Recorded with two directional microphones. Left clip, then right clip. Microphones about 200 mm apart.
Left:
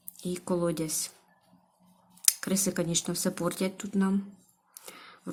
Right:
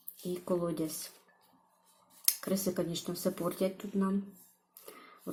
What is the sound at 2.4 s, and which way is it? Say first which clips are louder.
Speech: left 3 dB; 30° left (ahead or behind).